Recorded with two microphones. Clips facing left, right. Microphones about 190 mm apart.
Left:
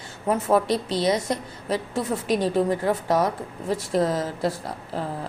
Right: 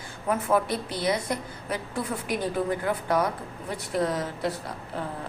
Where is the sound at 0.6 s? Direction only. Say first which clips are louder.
Left 6 dB; 90° left.